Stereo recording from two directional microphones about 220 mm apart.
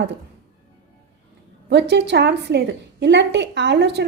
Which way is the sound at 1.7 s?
50° right (ahead or behind).